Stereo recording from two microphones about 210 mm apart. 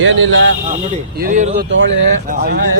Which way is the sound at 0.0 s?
65° right (ahead or behind).